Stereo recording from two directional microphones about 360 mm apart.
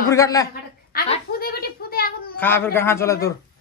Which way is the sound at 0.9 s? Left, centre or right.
Left.